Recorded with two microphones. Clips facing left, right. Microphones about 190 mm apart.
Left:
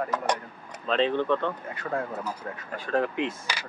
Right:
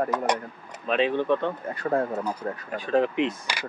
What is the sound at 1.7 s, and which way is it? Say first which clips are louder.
Speech: right 6 dB; 35° right (ahead or behind).